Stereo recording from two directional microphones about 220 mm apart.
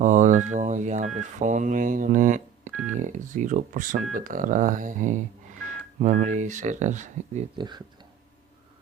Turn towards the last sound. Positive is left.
turn(degrees=-35)  # may be behind; listen again after turning